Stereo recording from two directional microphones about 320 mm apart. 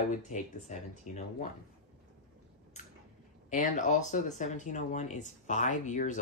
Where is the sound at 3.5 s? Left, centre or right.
Left.